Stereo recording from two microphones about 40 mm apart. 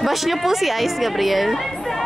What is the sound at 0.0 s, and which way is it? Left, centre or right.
A woman's voice, centre.